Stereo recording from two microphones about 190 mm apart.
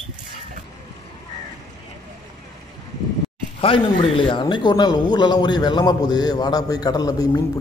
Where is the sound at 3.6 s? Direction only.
30° left (ahead or behind).